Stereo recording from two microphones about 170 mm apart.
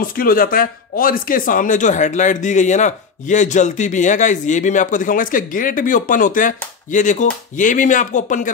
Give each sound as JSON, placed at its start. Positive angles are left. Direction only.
{"t": 0.0, "sound": "speech", "side_deg": 60}